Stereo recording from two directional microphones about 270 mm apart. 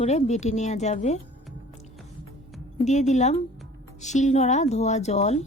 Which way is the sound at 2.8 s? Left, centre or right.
Left.